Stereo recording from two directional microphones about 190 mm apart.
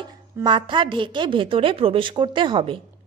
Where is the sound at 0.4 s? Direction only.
25° right (ahead or behind).